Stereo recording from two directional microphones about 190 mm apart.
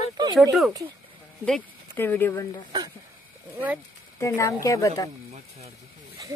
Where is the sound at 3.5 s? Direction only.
10° right (ahead or behind).